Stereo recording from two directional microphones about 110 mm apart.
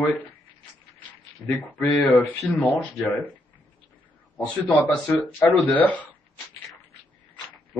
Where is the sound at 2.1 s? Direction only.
15° left (ahead or behind).